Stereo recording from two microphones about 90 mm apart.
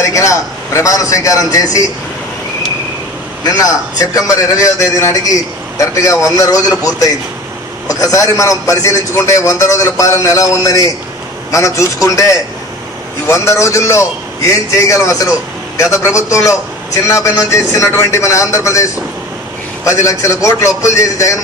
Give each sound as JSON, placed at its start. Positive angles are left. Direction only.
{"t": 0.0, "sound": "a man's voice", "side_deg": 35}
{"t": 3.4, "sound": "a man's voice", "side_deg": 45}